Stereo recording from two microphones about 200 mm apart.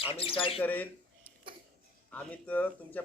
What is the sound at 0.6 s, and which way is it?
Speech, 10° left (ahead or behind).